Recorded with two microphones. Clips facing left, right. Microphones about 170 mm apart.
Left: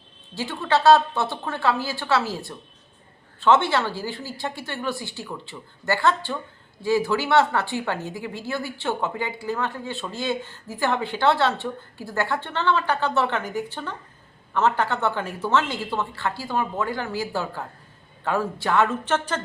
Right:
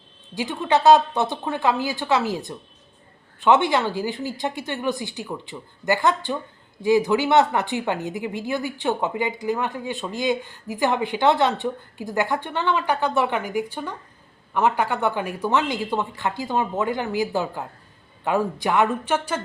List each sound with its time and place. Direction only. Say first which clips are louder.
0.3 s speech: right 2 dB; 15° right (ahead or behind)